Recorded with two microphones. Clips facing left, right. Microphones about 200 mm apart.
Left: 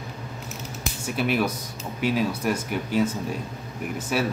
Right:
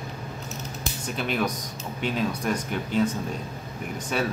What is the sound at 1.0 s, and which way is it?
Speech, 10° left (ahead or behind).